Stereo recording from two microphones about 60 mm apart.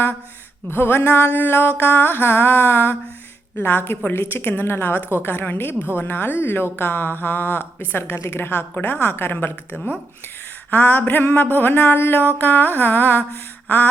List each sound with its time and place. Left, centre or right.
0.7 s speech: left